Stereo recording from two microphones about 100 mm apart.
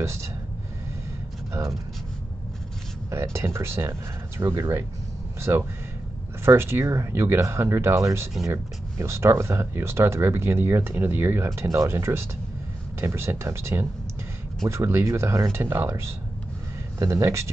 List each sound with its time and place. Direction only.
0.0 s speech: 30° right (ahead or behind)
1.5 s speech: 30° right (ahead or behind)
3.1 s speech: 25° right (ahead or behind)
17.0 s speech: 30° right (ahead or behind)